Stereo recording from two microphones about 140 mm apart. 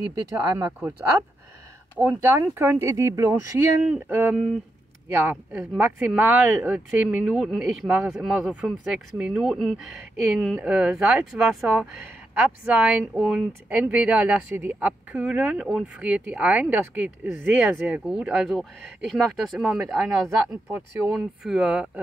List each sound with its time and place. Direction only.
0.0 s speech: 30° right (ahead or behind)
0.7 s speech: 15° right (ahead or behind)
2.0 s speech: 15° right (ahead or behind)
21.5 s speech: 5° right (ahead or behind)